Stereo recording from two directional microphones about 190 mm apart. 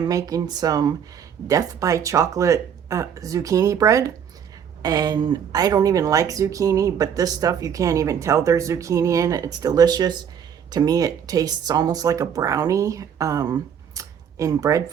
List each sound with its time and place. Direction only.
0.0 s speech: 20° right (ahead or behind)